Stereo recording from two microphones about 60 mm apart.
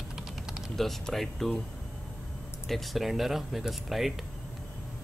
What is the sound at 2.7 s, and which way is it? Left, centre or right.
Speech, centre.